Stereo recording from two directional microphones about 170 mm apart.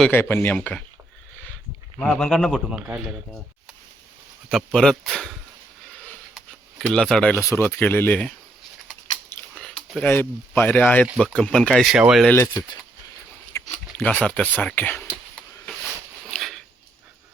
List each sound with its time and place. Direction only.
0.1 s speech: 15° left (ahead or behind)
2.0 s speech: 5° left (ahead or behind)
4.4 s speech: centre (ahead or behind)
5.9 s a sound: 5° left (ahead or behind)
7.4 s speech: 15° left (ahead or behind)
8.9 s typing: 5° left (ahead or behind)
9.9 s speech: 10° left (ahead or behind)
12.3 s speech: 15° left (ahead or behind)
13.5 s a sound: 15° left (ahead or behind)
13.9 s speech: 10° left (ahead or behind)
16.3 s a sound: centre (ahead or behind)